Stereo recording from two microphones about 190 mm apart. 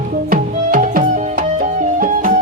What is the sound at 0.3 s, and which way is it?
Music, 45° right (ahead or behind).